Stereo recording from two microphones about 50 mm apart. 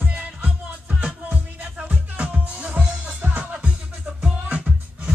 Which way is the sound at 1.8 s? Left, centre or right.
Right.